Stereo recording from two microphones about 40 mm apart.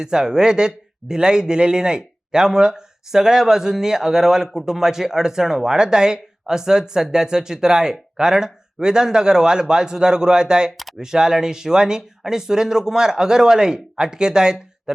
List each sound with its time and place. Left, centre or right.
0.0 s speech: centre